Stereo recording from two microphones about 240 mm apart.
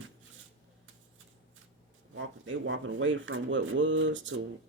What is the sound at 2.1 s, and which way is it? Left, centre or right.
Speech, right.